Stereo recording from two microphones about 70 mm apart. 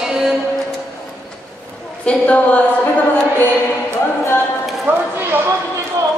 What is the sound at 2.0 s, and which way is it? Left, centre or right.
Speech, centre.